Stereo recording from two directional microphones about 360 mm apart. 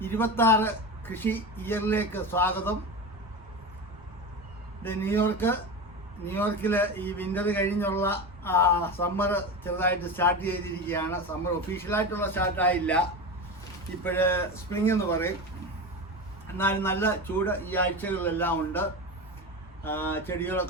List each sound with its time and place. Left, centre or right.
0.0 s a man's voice: centre
4.8 s a man's voice: centre
14.0 s speech: centre
16.6 s a man's voice: centre